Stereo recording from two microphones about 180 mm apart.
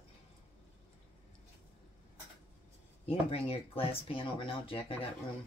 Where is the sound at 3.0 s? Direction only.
35° left (ahead or behind).